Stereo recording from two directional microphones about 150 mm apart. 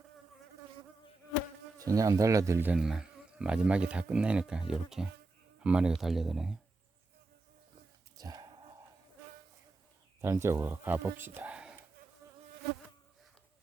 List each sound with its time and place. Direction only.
1.8 s speech: 25° right (ahead or behind)
2.7 s speech: 5° right (ahead or behind)
8.1 s a sound: 25° right (ahead or behind)
10.2 s speech: 20° right (ahead or behind)
12.2 s insect: 20° right (ahead or behind)